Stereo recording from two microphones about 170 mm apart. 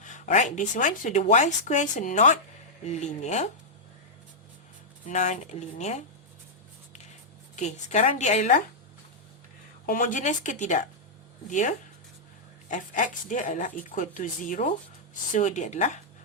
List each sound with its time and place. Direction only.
0.0 s speech: 45° left (ahead or behind)
5.0 s speech: 45° left (ahead or behind)
7.5 s speech: 45° left (ahead or behind)
9.8 s speech: 55° left (ahead or behind)